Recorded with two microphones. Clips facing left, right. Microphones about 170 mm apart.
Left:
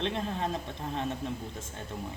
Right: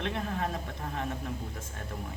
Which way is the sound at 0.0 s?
25° left (ahead or behind).